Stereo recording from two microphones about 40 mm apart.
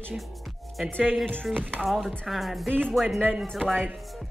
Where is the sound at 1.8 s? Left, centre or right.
Centre.